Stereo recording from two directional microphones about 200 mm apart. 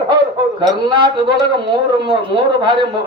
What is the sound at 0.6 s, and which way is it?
A man's voice, 20° right (ahead or behind).